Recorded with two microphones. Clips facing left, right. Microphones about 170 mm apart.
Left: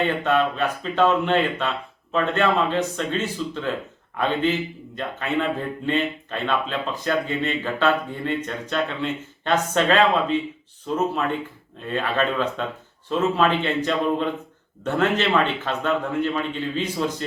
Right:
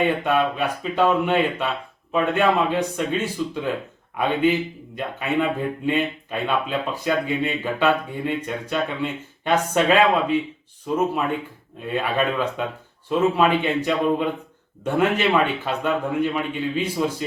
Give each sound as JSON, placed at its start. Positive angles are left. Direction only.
{"t": 0.0, "sound": "speech", "side_deg": -10}